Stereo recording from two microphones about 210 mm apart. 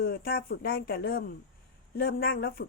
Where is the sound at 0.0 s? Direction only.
45° left (ahead or behind).